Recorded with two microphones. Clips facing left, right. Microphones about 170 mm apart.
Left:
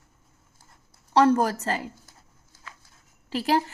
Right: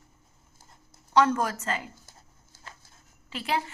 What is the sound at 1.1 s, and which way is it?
Speech, 35° left (ahead or behind).